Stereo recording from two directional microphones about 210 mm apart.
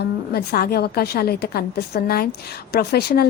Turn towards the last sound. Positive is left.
turn(degrees=45)  # may be behind; listen again after turning